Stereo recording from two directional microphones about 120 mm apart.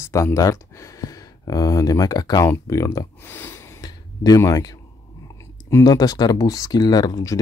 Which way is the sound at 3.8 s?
30° left (ahead or behind).